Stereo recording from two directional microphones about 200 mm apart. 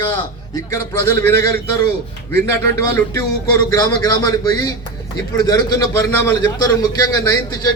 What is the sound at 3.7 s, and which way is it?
A man's voice, 20° left (ahead or behind).